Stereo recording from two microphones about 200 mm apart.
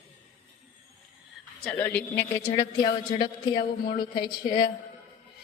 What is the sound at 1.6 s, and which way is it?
A man's voice, 5° left (ahead or behind).